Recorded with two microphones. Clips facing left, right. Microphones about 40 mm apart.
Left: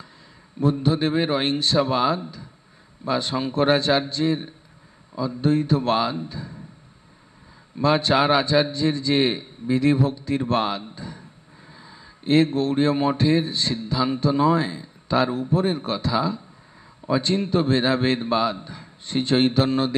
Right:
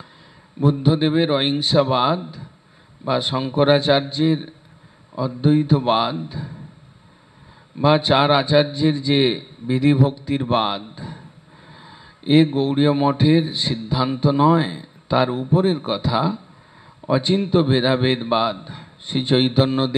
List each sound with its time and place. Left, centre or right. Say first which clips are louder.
0.8 s a man's voice: right 6 dB; centre
7.9 s a man's voice: right 3 dB; right
11.7 s a sound: right 2 dB; right
12.3 s a man's voice: right 3 dB; centre
15.2 s a man's voice: right 3 dB; right